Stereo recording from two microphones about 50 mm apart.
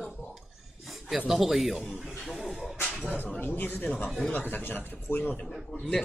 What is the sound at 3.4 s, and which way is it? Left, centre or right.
Speech, left.